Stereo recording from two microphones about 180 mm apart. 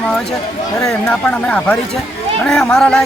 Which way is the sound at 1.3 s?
5° left (ahead or behind).